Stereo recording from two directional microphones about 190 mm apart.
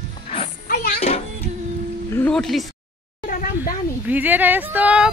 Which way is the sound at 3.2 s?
45° left (ahead or behind).